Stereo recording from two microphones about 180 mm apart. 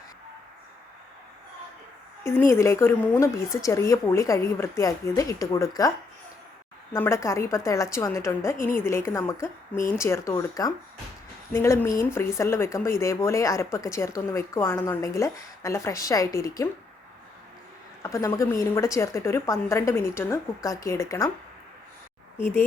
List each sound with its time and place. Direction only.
2.5 s speech: 15° left (ahead or behind)
6.9 s speech: 15° left (ahead or behind)
18.0 s speech: 15° left (ahead or behind)